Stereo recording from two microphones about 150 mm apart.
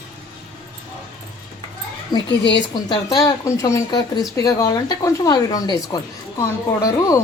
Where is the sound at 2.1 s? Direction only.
30° left (ahead or behind).